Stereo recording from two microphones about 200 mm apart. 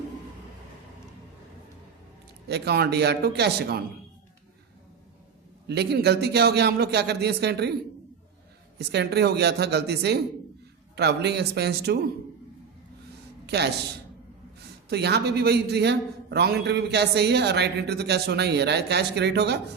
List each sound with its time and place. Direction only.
2.5 s a man's voice: 55° right (ahead or behind)
5.6 s a man's voice: 55° right (ahead or behind)
8.8 s a man's voice: 55° right (ahead or behind)
13.5 s a man's voice: 55° right (ahead or behind)
14.8 s a man's voice: 55° right (ahead or behind)